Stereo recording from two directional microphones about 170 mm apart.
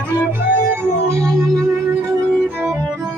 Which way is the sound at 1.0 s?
20° right (ahead or behind).